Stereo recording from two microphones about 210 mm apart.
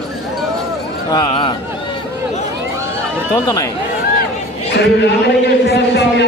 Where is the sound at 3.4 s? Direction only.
15° left (ahead or behind).